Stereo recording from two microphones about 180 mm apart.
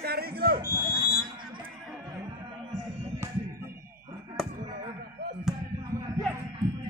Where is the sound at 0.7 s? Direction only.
20° right (ahead or behind).